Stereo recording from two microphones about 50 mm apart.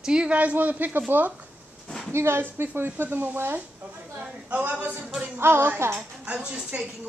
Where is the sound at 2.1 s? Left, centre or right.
Right.